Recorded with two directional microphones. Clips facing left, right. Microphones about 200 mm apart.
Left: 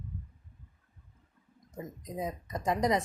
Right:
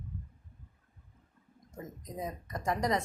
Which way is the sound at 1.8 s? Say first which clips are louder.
Left 3 dB; 20° left (ahead or behind).